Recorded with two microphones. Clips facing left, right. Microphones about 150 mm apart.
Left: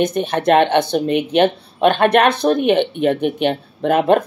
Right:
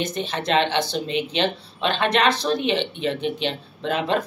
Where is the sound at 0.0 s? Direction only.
55° left (ahead or behind).